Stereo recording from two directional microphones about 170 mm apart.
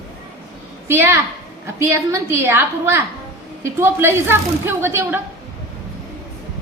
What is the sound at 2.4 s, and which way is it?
A woman's voice, 15° right (ahead or behind).